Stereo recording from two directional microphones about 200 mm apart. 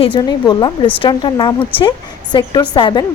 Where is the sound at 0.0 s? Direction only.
20° left (ahead or behind).